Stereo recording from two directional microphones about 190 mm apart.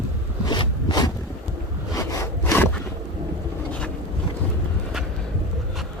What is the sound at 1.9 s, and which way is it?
Sawing, 15° left (ahead or behind).